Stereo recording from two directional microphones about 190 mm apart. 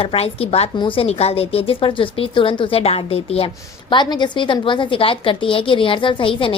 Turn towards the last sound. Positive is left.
turn(degrees=25)  # may be behind; listen again after turning